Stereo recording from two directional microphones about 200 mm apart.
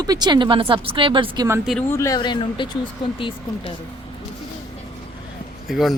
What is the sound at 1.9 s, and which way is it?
Speech, 15° left (ahead or behind).